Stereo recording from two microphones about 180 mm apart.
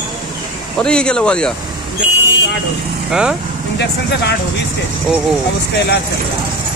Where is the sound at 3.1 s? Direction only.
5° right (ahead or behind).